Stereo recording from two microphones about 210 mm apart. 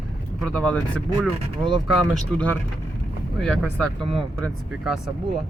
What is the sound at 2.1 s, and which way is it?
Speech, 5° left (ahead or behind).